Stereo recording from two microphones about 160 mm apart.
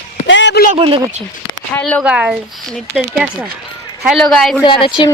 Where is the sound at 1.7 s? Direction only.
10° left (ahead or behind).